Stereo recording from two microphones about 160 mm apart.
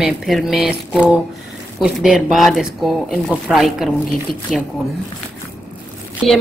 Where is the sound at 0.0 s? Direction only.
Centre (ahead or behind).